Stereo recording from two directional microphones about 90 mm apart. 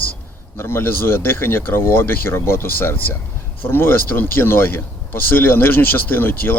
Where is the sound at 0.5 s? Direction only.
25° left (ahead or behind).